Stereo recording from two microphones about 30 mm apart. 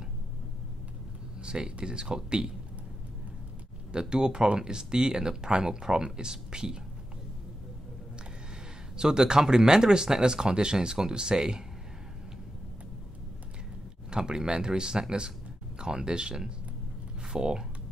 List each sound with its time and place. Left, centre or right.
1.4 s speech: right
3.9 s speech: right
8.9 s speech: right
14.1 s speech: right